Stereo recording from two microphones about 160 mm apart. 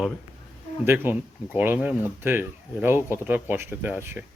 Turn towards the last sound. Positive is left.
turn(degrees=-10)  # may be behind; listen again after turning